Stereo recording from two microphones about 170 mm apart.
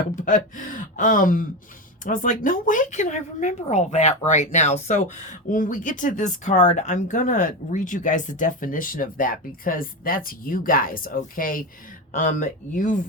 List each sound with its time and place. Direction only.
0.2 s speech: 50° left (ahead or behind)